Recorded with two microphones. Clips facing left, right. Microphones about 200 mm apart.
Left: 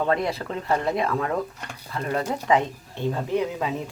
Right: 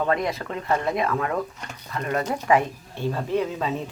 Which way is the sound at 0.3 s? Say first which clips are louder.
Even; 30° left (ahead or behind).